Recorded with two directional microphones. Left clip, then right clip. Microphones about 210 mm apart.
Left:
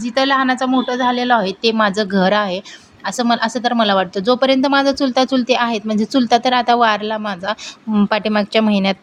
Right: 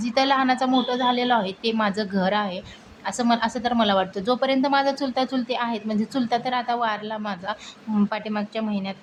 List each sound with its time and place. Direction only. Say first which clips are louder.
0.0 s a woman's voice: left 5 dB; 20° left (ahead or behind); by 9.0 s 45° left (ahead or behind)